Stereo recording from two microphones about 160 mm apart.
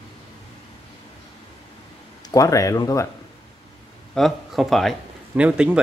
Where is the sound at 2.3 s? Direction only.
20° left (ahead or behind).